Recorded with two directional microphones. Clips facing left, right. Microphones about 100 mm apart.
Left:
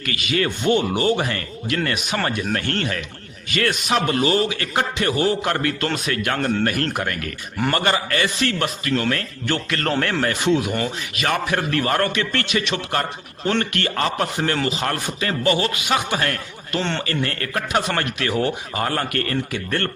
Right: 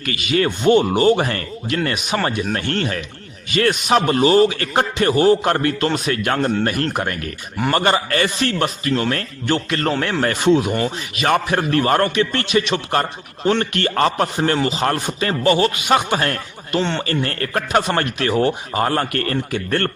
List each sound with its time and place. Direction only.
0.0 s a man's voice: 30° right (ahead or behind)
10.2 s speech: 35° right (ahead or behind)
13.9 s speech: 40° right (ahead or behind)
14.3 s speech: 25° right (ahead or behind)